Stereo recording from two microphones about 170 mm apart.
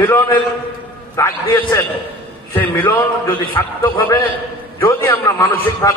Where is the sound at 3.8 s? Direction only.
15° left (ahead or behind).